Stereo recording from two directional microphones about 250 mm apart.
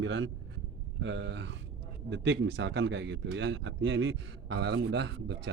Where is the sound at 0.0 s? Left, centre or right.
Right.